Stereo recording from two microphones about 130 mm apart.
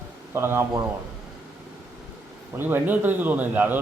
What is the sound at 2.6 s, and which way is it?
A man's voice, 15° right (ahead or behind).